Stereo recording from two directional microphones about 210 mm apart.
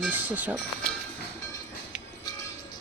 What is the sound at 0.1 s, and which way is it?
Speech, 10° right (ahead or behind).